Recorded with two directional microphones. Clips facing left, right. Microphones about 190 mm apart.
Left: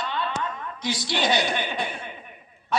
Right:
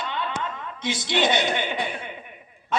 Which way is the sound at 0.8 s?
25° right (ahead or behind).